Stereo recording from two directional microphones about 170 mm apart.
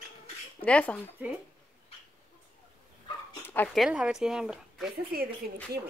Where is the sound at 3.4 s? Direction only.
10° left (ahead or behind).